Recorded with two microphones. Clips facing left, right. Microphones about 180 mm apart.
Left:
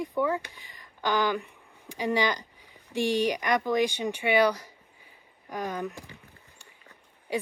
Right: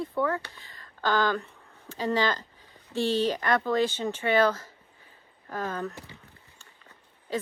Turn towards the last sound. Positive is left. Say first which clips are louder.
# left 1 dB
turn(degrees=15)  # may be behind; listen again after turning